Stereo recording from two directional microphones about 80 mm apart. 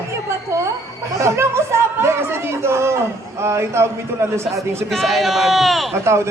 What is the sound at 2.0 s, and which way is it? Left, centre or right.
A man's voice, right.